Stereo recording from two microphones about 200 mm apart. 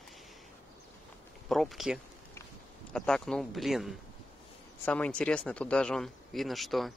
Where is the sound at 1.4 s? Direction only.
Centre (ahead or behind).